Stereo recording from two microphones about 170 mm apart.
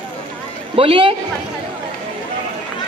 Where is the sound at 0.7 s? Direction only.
35° right (ahead or behind).